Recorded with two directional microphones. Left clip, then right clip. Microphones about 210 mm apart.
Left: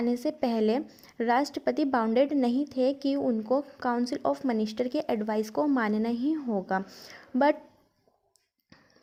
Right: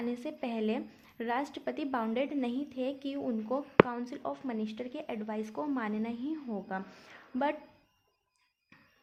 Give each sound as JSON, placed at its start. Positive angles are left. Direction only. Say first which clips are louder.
{"t": 0.0, "sound": "a woman's voice", "louder": "left 9 dB", "side_deg": 45}